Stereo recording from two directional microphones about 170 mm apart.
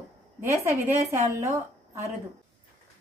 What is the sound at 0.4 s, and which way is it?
A woman's voice, 15° right (ahead or behind).